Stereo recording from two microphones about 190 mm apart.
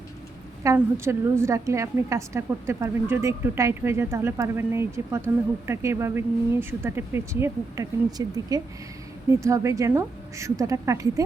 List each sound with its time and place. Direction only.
0.6 s a woman's voice: 15° right (ahead or behind)